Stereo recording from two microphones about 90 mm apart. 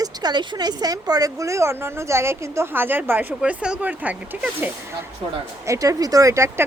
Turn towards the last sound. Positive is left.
turn(degrees=-35)  # may be behind; listen again after turning